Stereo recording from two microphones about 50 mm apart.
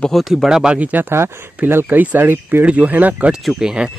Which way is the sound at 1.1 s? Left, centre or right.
Right.